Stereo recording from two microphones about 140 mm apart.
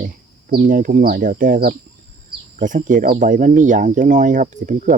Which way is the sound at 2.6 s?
65° right (ahead or behind).